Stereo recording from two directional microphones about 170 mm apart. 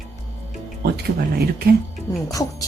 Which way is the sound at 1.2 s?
65° right (ahead or behind).